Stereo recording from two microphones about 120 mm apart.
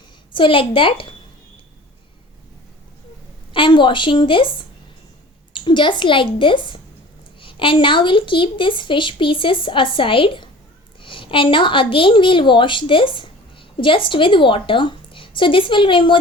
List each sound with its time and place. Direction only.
0.3 s a woman's voice: 45° left (ahead or behind)
3.5 s a woman's voice: 45° left (ahead or behind)